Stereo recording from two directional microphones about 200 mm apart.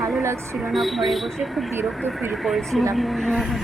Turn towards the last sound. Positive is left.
turn(degrees=0)  # may be behind; listen again after turning